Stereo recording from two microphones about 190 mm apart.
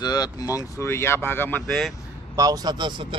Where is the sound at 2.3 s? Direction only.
20° right (ahead or behind).